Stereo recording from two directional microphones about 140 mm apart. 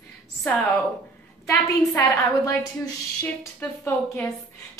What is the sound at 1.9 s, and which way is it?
A woman's voice, 15° left (ahead or behind).